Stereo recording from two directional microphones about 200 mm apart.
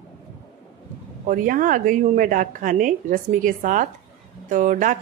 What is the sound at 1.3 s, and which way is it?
Speech, 45° right (ahead or behind).